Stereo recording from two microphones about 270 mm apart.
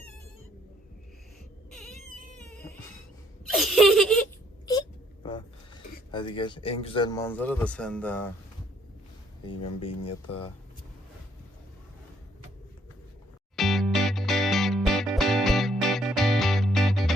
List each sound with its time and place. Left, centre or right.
1.7 s a sound: centre
2.4 s music: centre
3.4 s laughter: centre
5.2 s speech: centre
9.5 s speech: centre
13.6 s music: centre